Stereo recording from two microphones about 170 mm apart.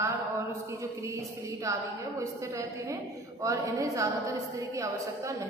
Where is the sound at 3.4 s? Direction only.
20° right (ahead or behind).